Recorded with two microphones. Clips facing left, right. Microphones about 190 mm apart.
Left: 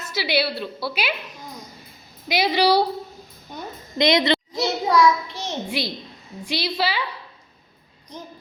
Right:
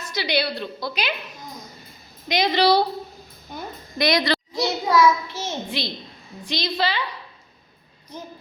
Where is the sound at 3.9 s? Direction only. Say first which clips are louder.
Left 2 dB; 20° left (ahead or behind).